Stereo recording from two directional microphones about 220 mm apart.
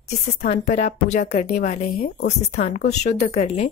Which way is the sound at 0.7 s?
30° left (ahead or behind).